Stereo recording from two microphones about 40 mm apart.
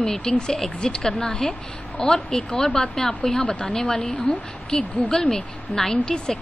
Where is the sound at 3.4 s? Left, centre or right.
Left.